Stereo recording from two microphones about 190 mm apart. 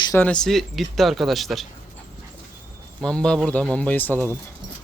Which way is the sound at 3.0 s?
5° left (ahead or behind).